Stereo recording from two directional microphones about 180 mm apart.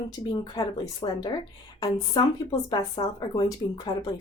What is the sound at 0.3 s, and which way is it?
Speech, 25° left (ahead or behind).